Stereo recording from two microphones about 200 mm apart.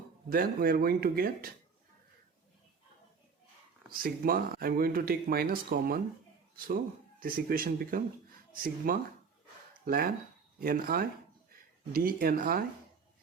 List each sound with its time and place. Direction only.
0.3 s speech: 45° right (ahead or behind)
3.9 s speech: 45° right (ahead or behind)
7.2 s speech: 45° right (ahead or behind)